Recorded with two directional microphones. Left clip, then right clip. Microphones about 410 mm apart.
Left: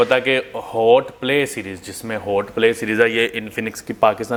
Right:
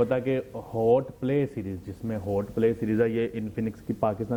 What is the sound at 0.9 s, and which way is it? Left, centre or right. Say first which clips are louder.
Speech: left 9 dB; centre.